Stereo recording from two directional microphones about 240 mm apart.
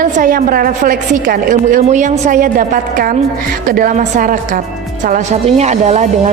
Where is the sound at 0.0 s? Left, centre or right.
Right.